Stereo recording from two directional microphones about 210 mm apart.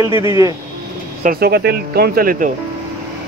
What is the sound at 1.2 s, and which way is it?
Speech, 45° right (ahead or behind).